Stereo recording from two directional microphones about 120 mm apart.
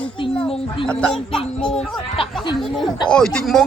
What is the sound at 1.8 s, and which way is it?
Speech, 50° left (ahead or behind).